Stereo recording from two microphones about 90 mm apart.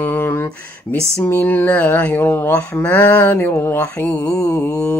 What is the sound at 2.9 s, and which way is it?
Mantra, 20° left (ahead or behind).